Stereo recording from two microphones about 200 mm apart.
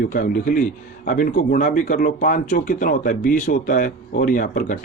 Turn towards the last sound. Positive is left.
turn(degrees=45)  # may be behind; listen again after turning